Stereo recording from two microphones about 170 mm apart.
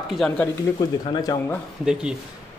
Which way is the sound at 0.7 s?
20° left (ahead or behind).